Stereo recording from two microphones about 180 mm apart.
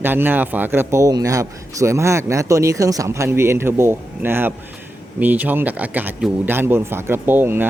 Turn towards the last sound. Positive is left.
turn(degrees=-10)  # may be behind; listen again after turning